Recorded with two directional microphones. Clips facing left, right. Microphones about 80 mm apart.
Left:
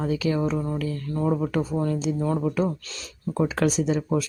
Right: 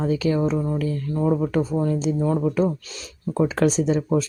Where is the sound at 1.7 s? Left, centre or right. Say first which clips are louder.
Right 3 dB; centre.